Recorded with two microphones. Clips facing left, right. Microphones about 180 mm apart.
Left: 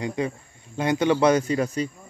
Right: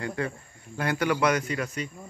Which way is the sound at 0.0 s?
15° left (ahead or behind).